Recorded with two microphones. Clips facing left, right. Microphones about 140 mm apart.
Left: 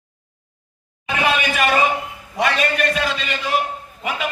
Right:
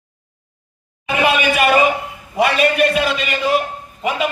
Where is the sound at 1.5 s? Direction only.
10° right (ahead or behind).